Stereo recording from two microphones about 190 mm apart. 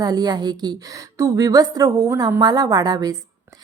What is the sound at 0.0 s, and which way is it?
A woman's voice, 20° right (ahead or behind).